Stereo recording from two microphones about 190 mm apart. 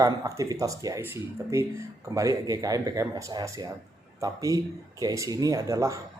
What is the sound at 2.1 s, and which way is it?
Speech, 15° right (ahead or behind).